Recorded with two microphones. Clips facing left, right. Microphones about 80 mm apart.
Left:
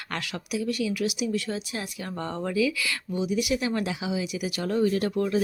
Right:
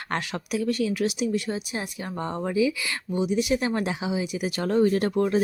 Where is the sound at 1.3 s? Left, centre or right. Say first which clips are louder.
Right 2 dB; right.